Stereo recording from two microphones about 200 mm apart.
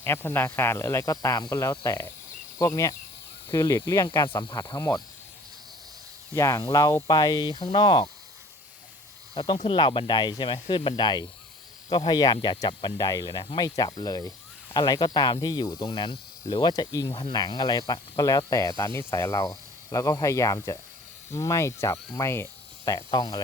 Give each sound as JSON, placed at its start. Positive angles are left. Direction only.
{"t": 0.0, "sound": "speech", "side_deg": 10}
{"t": 6.3, "sound": "speech", "side_deg": 15}
{"t": 9.3, "sound": "speech", "side_deg": 25}